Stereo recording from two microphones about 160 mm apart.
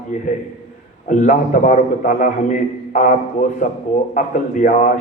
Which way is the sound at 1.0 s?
55° left (ahead or behind).